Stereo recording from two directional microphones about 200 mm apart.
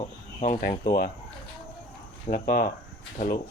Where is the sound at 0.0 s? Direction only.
30° left (ahead or behind).